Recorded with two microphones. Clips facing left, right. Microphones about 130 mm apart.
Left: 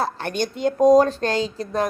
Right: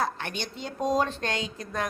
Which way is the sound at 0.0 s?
40° left (ahead or behind).